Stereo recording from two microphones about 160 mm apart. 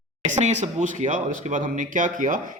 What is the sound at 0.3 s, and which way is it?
A man's voice, 50° right (ahead or behind).